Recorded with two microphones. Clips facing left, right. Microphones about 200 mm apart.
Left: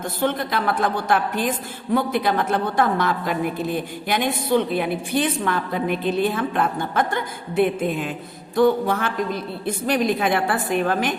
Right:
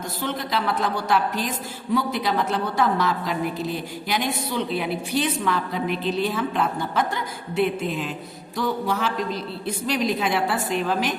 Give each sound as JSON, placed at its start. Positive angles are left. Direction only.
{"t": 0.2, "sound": "a woman's voice", "side_deg": 55}